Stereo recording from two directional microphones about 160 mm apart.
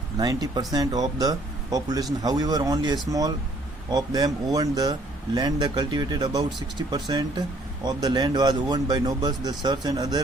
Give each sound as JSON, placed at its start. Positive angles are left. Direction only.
{"t": 0.2, "sound": "speech", "side_deg": -25}